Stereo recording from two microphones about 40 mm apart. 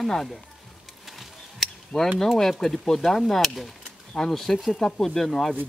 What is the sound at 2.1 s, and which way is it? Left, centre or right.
Speech, centre.